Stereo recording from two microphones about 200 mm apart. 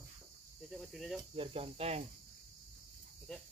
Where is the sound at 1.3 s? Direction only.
25° right (ahead or behind).